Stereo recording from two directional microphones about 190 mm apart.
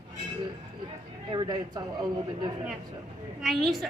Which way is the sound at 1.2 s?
20° right (ahead or behind).